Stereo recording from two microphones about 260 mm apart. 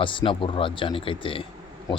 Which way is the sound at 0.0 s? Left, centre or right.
Centre.